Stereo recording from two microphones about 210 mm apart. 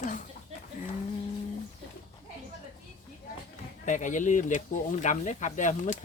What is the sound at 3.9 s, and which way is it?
Speech, 35° left (ahead or behind).